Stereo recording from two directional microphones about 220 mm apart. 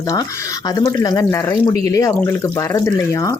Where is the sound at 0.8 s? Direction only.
20° left (ahead or behind).